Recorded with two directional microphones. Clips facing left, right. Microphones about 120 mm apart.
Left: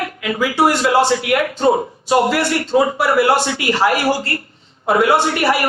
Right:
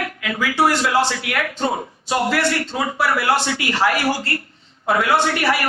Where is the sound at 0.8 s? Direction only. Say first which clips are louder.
Left 5 dB; 35° left (ahead or behind).